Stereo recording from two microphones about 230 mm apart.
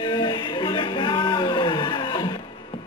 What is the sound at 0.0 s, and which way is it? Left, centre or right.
Music, left.